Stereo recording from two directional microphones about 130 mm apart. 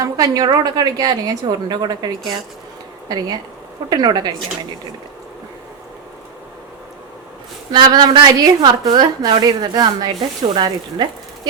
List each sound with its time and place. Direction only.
0.0 s a woman's voice: 30° right (ahead or behind)
3.1 s a woman's voice: 30° right (ahead or behind)
7.7 s a woman's voice: 35° right (ahead or behind)